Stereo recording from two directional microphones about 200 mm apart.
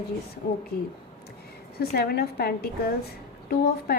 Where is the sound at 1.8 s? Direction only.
50° left (ahead or behind).